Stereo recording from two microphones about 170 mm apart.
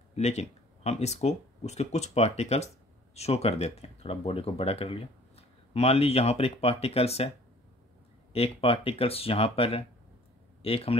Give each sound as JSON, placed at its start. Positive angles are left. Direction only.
{"t": 0.1, "sound": "speech", "side_deg": 40}
{"t": 8.3, "sound": "speech", "side_deg": 35}